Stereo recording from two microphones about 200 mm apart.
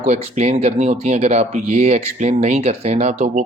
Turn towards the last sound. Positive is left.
turn(degrees=-35)  # may be behind; listen again after turning